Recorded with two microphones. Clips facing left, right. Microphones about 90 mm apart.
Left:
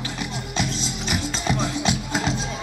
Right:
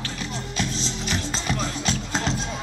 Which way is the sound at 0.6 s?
15° left (ahead or behind).